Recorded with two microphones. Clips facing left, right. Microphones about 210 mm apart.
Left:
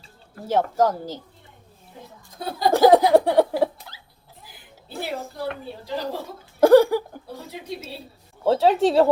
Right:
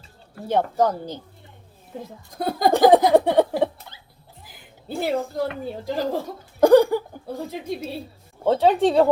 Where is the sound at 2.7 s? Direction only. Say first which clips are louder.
Left 1 dB; centre (ahead or behind).